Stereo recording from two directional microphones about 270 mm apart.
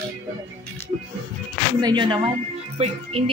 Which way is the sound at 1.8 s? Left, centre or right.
Centre.